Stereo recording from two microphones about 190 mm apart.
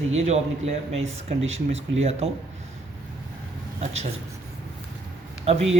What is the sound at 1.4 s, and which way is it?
Speech, 90° right.